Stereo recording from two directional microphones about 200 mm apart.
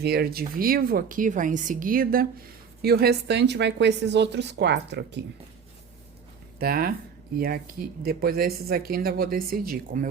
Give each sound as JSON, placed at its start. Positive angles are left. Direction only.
{"t": 0.0, "sound": "a woman's voice", "side_deg": -50}
{"t": 6.6, "sound": "a woman's voice", "side_deg": -50}